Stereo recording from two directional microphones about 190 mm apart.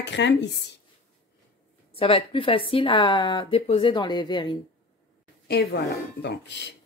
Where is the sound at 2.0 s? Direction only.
30° left (ahead or behind).